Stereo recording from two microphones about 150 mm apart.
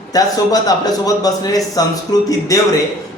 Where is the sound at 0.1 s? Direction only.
25° left (ahead or behind).